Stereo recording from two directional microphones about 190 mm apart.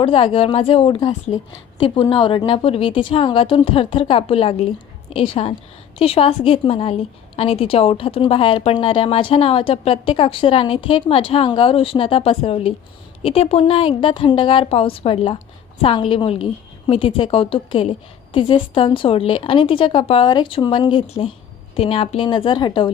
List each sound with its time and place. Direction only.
0.0 s a woman's voice: 25° left (ahead or behind)